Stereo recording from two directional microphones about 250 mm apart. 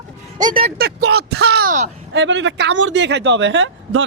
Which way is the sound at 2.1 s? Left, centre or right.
Right.